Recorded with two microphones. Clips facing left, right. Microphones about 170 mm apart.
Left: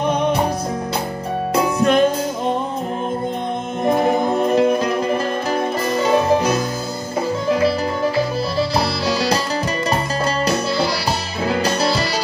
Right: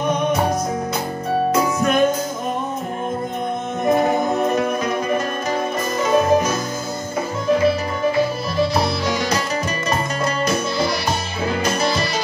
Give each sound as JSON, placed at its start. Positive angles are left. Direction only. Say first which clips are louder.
{"t": 0.0, "sound": "music", "louder": "left 1 dB", "side_deg": 30}
{"t": 1.5, "sound": "music", "louder": "left 5 dB", "side_deg": 30}
{"t": 4.4, "sound": "music", "louder": "left 4 dB", "side_deg": 30}
{"t": 8.7, "sound": "music", "louder": "left 1 dB", "side_deg": 35}
{"t": 11.6, "sound": "music", "louder": "even", "side_deg": 35}